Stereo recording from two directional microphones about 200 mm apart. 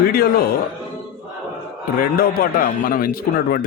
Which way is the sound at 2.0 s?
45° left (ahead or behind).